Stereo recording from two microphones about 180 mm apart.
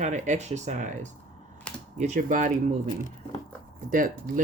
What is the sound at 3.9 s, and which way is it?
Speech, 50° right (ahead or behind).